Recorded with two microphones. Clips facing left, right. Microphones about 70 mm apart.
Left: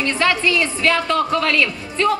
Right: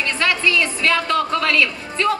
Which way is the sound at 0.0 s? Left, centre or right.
Left.